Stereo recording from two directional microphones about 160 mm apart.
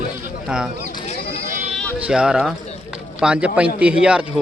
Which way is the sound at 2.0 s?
5° right (ahead or behind).